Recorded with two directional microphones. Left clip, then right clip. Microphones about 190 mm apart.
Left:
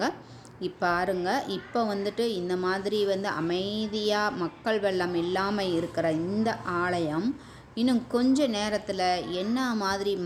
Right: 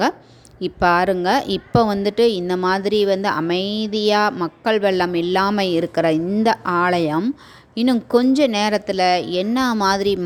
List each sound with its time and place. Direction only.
0.6 s a woman's voice: 45° right (ahead or behind)